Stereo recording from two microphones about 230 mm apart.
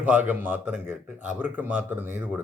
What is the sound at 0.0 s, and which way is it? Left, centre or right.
Speech, centre.